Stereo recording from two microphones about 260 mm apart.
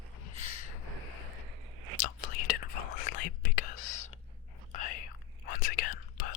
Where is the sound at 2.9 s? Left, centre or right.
Left.